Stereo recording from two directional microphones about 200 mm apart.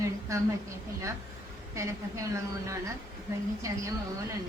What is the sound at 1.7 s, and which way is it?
A woman's voice, 15° right (ahead or behind).